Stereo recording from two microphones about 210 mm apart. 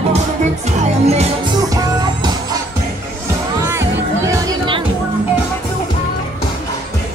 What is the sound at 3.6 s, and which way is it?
Music, 15° right (ahead or behind).